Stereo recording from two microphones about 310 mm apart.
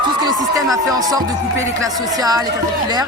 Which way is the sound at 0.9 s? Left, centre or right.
Centre.